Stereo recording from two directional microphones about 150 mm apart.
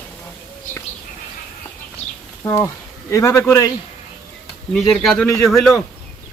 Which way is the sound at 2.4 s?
20° left (ahead or behind).